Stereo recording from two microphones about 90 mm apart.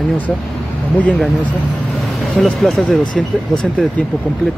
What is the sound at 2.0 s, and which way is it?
Vehicle, centre (ahead or behind).